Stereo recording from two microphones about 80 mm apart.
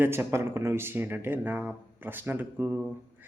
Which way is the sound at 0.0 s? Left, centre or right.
Right.